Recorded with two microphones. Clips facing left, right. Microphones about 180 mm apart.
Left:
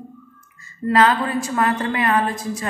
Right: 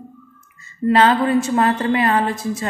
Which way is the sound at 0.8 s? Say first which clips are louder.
Right 3 dB; 25° right (ahead or behind).